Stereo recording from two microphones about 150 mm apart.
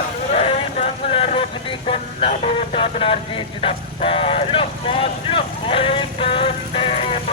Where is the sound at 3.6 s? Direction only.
40° left (ahead or behind).